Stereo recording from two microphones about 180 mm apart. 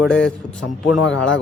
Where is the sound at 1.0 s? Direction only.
90° left.